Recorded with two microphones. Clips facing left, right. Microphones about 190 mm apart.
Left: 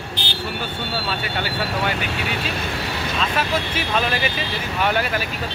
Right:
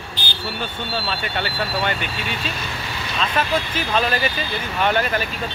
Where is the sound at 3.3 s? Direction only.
10° left (ahead or behind).